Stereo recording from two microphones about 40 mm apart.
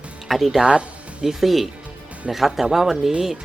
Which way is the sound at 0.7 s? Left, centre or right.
Right.